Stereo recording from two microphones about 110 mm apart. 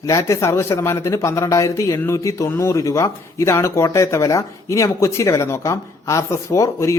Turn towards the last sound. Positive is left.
turn(degrees=25)  # may be behind; listen again after turning